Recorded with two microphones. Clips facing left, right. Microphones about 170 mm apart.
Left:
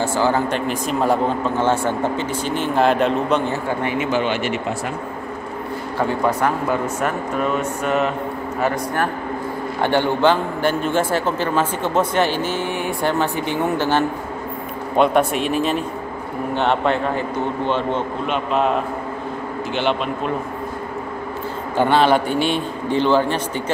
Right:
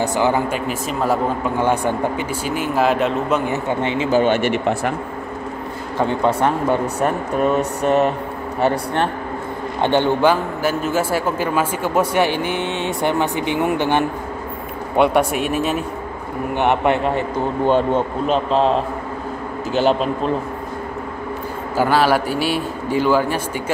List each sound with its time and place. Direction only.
0.0 s a man's voice: 15° right (ahead or behind)
0.5 s a man's voice: 5° right (ahead or behind)
1.6 s a man's voice: 15° right (ahead or behind)
3.6 s speech: 25° right (ahead or behind)
4.1 s speech: 45° right (ahead or behind)
5.9 s speech: 20° right (ahead or behind); by 8.1 s 40° right (ahead or behind)
8.5 s a man's voice: 30° right (ahead or behind); by 15.8 s 5° right (ahead or behind)
16.5 s a man's voice: 15° right (ahead or behind)
17.6 s speech: 45° right (ahead or behind)
21.7 s a man's voice: 5° right (ahead or behind)